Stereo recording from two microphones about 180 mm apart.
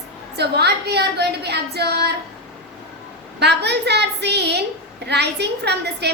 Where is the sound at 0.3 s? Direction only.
65° right (ahead or behind).